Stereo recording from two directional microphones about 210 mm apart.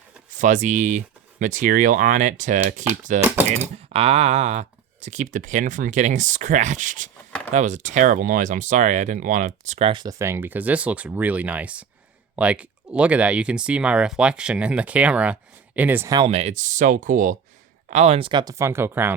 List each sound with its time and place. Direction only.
0.3 s speech: 35° right (ahead or behind)
3.2 s speech: 10° right (ahead or behind)
3.9 s a sound: 25° right (ahead or behind)
5.0 s speech: 35° right (ahead or behind); by 19.1 s 10° right (ahead or behind)